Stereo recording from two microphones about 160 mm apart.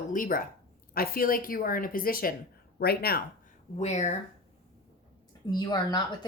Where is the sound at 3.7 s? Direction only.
45° left (ahead or behind).